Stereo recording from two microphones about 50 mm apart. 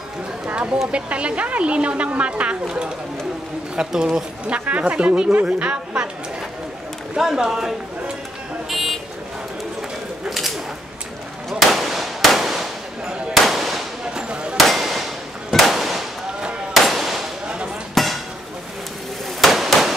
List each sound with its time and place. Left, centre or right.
0.9 s a woman's voice: right
4.5 s a woman's voice: right
7.2 s speech: centre
8.6 s vehicle: centre
11.7 s firecracker: centre
14.1 s a sound: right
14.6 s clang: centre
15.5 s firecracker: centre
17.9 s a sound: centre
19.4 s a sound: centre